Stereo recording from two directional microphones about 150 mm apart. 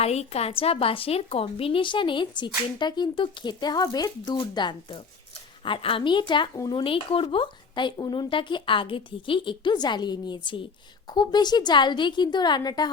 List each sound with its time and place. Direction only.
0.0 s a woman's voice: 45° left (ahead or behind); by 12.9 s 25° left (ahead or behind)